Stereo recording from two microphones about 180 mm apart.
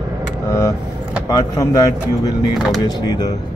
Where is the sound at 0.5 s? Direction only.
20° left (ahead or behind).